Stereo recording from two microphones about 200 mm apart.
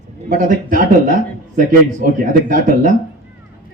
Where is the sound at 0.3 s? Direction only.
40° right (ahead or behind).